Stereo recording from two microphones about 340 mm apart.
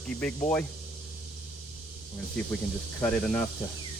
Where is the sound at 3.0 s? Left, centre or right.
Centre.